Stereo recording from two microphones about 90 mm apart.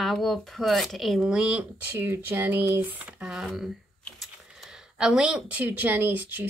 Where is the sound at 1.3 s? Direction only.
10° right (ahead or behind).